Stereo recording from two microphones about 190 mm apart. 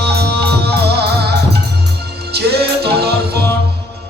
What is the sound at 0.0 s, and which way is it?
Music, 60° right (ahead or behind).